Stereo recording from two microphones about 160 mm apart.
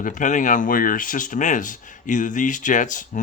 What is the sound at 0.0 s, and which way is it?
Speech, 55° left (ahead or behind).